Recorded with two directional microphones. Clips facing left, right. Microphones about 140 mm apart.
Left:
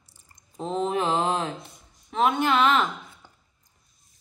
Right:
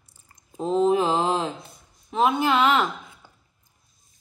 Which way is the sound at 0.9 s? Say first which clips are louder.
Right 1 dB; 30° right (ahead or behind).